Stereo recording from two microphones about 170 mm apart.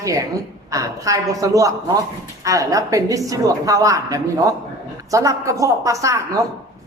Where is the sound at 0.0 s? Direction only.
20° right (ahead or behind).